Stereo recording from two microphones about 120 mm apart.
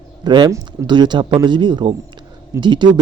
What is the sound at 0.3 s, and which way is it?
Speech, 35° right (ahead or behind).